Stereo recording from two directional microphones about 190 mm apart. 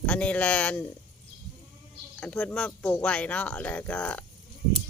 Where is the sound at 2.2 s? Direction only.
5° left (ahead or behind).